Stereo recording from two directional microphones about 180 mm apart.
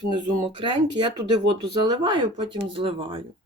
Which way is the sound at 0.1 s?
25° right (ahead or behind).